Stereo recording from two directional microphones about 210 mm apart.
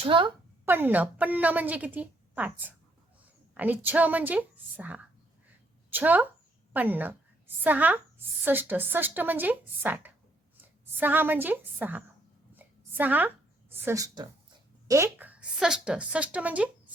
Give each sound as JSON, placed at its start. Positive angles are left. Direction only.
{"t": 0.0, "sound": "speech", "side_deg": -25}
{"t": 0.6, "sound": "a woman's voice", "side_deg": -10}
{"t": 12.5, "sound": "a sound", "side_deg": -10}
{"t": 14.8, "sound": "a woman's voice", "side_deg": -15}